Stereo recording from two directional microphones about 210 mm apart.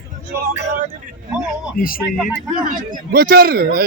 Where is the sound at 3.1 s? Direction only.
45° right (ahead or behind).